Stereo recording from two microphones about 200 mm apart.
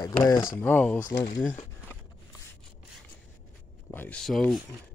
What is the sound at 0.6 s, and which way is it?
Speech, 10° left (ahead or behind).